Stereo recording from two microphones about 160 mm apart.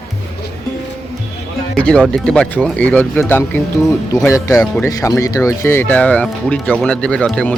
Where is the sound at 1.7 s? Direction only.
5° left (ahead or behind).